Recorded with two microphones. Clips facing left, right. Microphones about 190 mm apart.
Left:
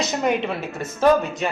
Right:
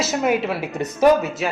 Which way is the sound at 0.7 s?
20° right (ahead or behind).